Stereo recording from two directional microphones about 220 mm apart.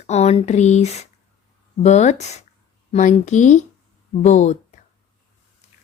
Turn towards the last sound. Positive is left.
turn(degrees=35)  # may be behind; listen again after turning